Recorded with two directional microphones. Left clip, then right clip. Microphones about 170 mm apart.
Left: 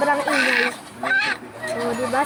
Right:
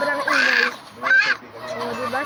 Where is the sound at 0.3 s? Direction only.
35° right (ahead or behind).